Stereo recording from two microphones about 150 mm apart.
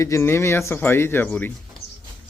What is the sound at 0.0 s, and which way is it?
Speech, 20° left (ahead or behind).